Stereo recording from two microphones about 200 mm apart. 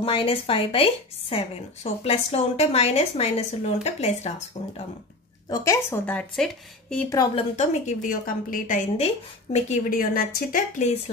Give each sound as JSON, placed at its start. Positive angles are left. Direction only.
{"t": 0.0, "sound": "a woman's voice", "side_deg": 25}
{"t": 5.5, "sound": "speech", "side_deg": 15}
{"t": 7.1, "sound": "speech", "side_deg": 20}
{"t": 7.5, "sound": "a woman's voice", "side_deg": 40}